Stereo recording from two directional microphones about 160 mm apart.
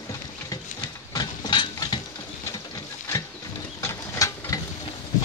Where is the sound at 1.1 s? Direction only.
25° left (ahead or behind).